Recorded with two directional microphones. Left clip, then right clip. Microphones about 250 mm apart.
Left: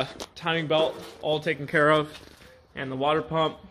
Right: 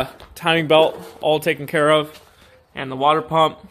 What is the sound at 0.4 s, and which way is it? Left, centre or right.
Speech, right.